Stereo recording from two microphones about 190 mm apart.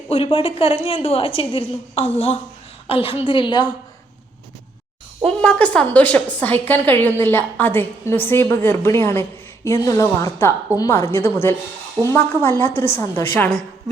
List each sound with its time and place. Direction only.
0.1 s a woman's voice: 30° left (ahead or behind)
5.2 s a woman's voice: 5° left (ahead or behind)